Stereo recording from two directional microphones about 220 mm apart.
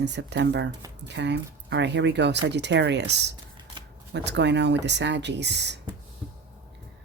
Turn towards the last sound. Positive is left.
turn(degrees=-50)  # may be behind; listen again after turning